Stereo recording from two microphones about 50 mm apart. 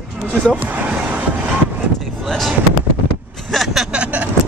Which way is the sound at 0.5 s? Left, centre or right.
Right.